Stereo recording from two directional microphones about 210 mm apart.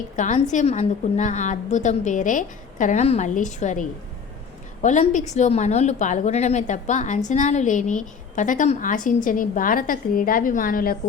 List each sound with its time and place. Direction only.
0.2 s a woman's voice: 35° left (ahead or behind)